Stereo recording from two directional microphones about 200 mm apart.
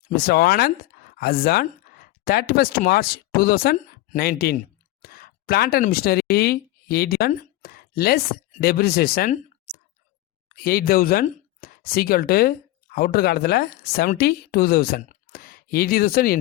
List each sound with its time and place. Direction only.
0.1 s speech: 50° left (ahead or behind)
10.5 s speech: 50° left (ahead or behind)